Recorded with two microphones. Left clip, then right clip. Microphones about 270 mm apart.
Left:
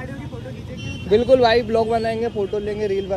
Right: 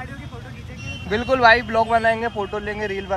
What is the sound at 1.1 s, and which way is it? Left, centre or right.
A man's voice, centre.